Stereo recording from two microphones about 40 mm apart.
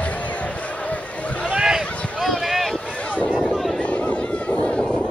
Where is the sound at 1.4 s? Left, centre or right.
Centre.